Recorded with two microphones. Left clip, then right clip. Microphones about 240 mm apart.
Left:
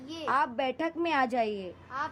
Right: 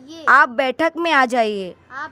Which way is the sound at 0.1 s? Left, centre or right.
Right.